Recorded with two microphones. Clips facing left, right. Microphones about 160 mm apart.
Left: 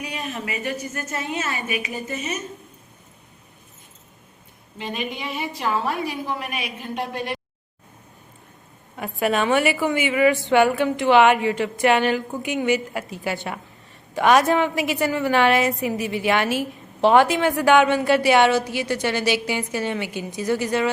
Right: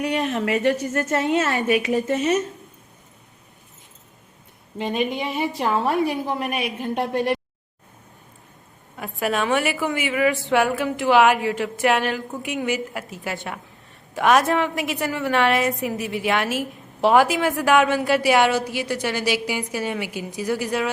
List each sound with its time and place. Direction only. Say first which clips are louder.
0.0 s a woman's voice: right 8 dB; 65° right (ahead or behind)
4.8 s a woman's voice: right 6 dB; 45° right (ahead or behind)
9.0 s a woman's voice: left 2 dB; centre (ahead or behind)